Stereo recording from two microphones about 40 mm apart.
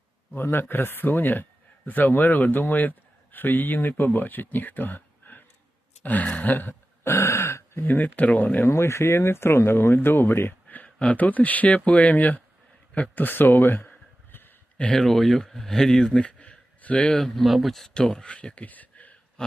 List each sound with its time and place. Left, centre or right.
0.3 s a man's voice: left
6.0 s a sound: left
7.0 s throat clearing: left
7.9 s a sound: left
8.6 s speech: left
10.8 s a sound: left
11.2 s speech: left
13.1 s a man's voice: left
14.9 s speech: centre; by 17.1 s left
17.2 s speech: centre
17.9 s speech: centre
18.6 s a sound: left